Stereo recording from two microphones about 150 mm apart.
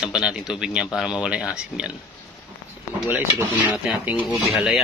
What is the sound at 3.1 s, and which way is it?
Speech, 15° right (ahead or behind).